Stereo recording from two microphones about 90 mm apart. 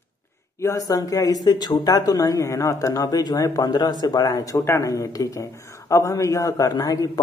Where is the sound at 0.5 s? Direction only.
35° left (ahead or behind).